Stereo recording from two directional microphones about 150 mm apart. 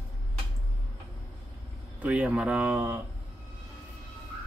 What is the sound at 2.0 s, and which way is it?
Speech, 10° right (ahead or behind).